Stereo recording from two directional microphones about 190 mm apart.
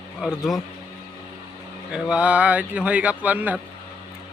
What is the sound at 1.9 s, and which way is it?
Speech, 5° right (ahead or behind).